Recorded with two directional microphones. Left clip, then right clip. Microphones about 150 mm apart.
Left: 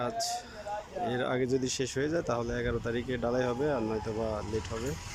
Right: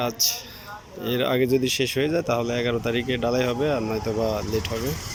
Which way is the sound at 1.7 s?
90° left.